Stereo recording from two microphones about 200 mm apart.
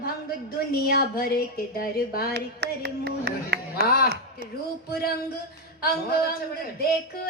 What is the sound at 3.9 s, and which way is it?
Speech, 50° left (ahead or behind).